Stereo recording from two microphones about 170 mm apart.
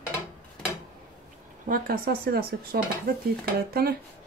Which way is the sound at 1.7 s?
60° right (ahead or behind).